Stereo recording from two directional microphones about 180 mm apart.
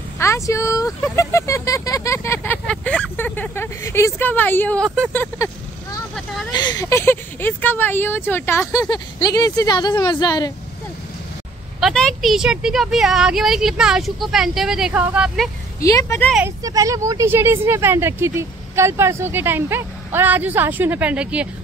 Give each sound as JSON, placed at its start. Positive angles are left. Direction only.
{"t": 0.2, "sound": "speech", "side_deg": 15}
{"t": 6.5, "sound": "speech", "side_deg": 25}
{"t": 11.8, "sound": "speech", "side_deg": 5}
{"t": 15.8, "sound": "speech", "side_deg": 20}
{"t": 16.4, "sound": "speech", "side_deg": -20}